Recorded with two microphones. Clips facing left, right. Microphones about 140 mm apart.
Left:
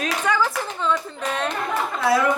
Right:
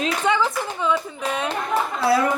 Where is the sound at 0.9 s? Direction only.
10° right (ahead or behind).